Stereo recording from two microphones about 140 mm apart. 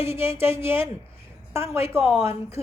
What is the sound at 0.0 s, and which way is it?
A woman's voice, 20° right (ahead or behind).